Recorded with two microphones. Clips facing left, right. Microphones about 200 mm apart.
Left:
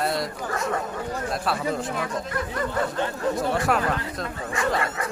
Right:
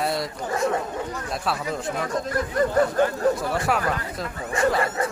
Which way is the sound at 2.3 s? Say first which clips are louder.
Right 5 dB; 40° right (ahead or behind).